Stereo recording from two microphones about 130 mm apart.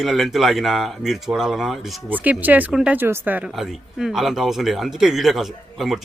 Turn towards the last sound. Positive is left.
turn(degrees=0)  # may be behind; listen again after turning